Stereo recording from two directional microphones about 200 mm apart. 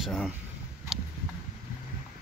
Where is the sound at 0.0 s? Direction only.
Centre (ahead or behind).